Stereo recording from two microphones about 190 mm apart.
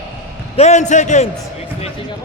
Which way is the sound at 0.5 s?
35° left (ahead or behind).